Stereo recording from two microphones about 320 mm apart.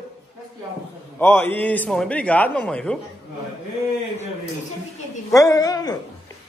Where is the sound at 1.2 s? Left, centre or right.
Centre.